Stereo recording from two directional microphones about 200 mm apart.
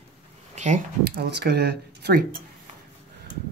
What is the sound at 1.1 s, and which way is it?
Speech, 55° right (ahead or behind).